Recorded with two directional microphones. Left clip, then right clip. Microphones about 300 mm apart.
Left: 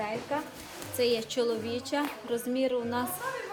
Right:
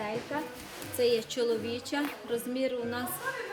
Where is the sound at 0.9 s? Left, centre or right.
Centre.